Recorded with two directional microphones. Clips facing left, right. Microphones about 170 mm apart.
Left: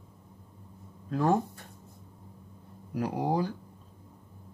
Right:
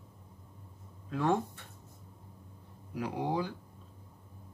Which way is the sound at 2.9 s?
40° left (ahead or behind).